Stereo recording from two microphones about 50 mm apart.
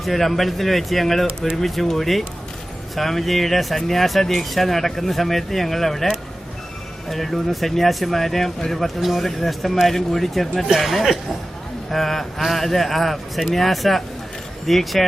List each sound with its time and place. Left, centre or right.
0.0 s speech: centre
7.1 s speech: centre